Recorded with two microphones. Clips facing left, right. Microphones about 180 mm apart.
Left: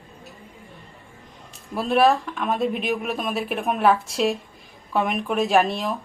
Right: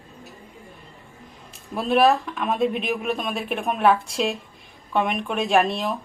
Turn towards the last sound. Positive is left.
turn(degrees=0)  # may be behind; listen again after turning